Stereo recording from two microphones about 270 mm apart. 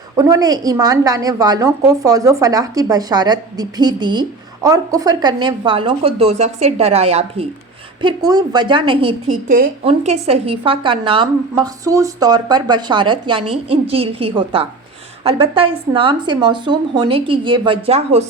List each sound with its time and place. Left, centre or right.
0.2 s a woman's voice: centre